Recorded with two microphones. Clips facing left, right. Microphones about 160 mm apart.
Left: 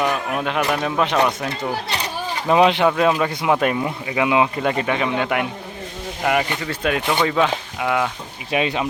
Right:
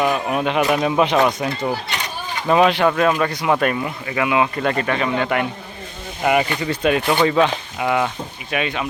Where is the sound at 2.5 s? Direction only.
15° left (ahead or behind).